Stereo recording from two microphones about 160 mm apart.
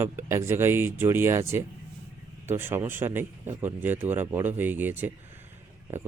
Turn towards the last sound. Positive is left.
turn(degrees=-15)  # may be behind; listen again after turning